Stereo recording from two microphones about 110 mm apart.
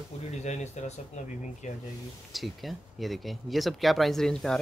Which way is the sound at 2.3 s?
Centre (ahead or behind).